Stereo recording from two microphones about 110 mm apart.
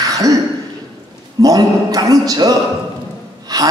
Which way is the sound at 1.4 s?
35° right (ahead or behind).